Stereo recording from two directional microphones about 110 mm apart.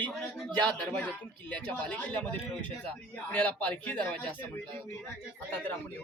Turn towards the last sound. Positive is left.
turn(degrees=15)  # may be behind; listen again after turning